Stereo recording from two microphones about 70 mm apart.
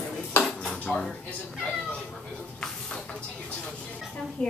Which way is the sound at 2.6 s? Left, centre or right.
Centre.